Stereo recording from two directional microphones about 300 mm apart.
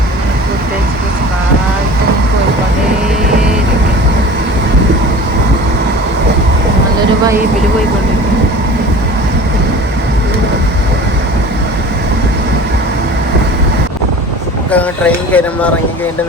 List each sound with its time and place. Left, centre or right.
14.7 s speech: centre